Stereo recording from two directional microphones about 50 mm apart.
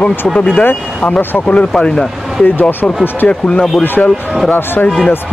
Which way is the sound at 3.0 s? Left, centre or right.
Left.